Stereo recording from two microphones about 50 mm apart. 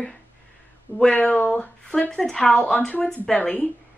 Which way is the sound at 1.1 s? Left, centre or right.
Left.